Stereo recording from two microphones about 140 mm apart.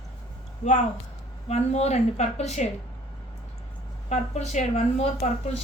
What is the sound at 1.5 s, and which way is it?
A woman's voice, 50° left (ahead or behind).